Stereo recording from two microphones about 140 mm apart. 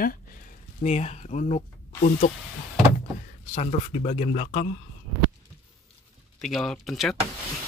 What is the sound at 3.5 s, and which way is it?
Speech, 50° left (ahead or behind).